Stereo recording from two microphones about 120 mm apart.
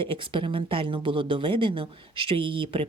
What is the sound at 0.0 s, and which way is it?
Speech, 45° right (ahead or behind).